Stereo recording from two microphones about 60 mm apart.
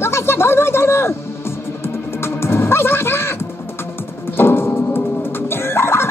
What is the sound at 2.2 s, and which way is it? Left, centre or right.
Music, left.